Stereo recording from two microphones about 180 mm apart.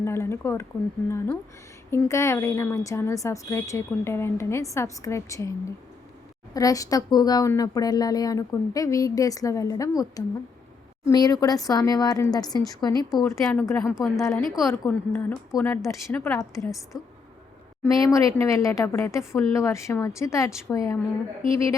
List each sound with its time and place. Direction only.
0.0 s a woman's voice: 15° left (ahead or behind)
16.9 s speech: centre (ahead or behind)
17.8 s a woman's voice: 20° left (ahead or behind)